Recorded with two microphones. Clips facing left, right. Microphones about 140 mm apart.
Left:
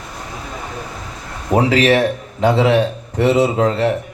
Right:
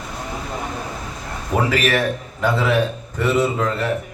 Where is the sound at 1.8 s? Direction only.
30° left (ahead or behind).